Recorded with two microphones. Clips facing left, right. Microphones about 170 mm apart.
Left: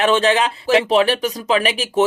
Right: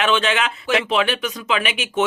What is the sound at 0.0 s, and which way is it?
Speech, 35° left (ahead or behind).